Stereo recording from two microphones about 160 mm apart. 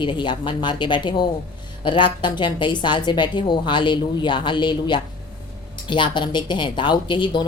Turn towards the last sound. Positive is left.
turn(degrees=30)  # may be behind; listen again after turning